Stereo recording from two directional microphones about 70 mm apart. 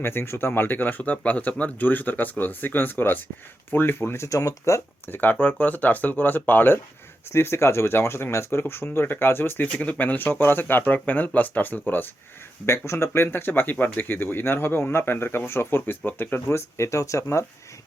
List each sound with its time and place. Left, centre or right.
0.0 s speech: left
4.3 s speech: left
5.1 s speech: left
7.3 s speech: left
12.6 s speech: left